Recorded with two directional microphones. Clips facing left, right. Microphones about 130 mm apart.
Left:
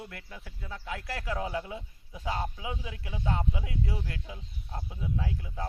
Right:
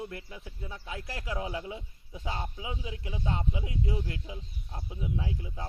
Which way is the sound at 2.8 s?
25° right (ahead or behind).